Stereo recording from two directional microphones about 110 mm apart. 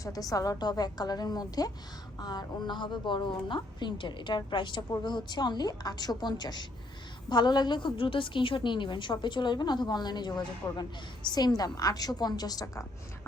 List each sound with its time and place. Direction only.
0.0 s a woman's voice: 30° left (ahead or behind)